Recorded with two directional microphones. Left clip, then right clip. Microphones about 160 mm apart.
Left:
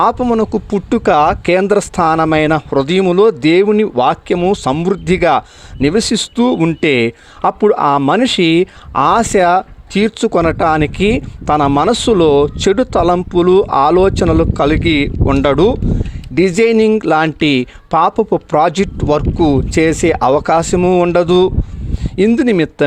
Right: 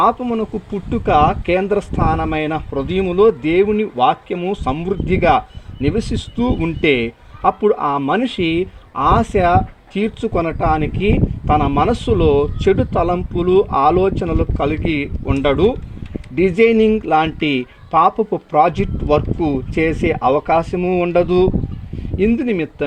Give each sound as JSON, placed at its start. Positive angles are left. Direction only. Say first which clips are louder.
{"t": 0.0, "sound": "speech", "louder": "left 4 dB", "side_deg": 30}
{"t": 2.7, "sound": "speech", "louder": "left 4 dB", "side_deg": 35}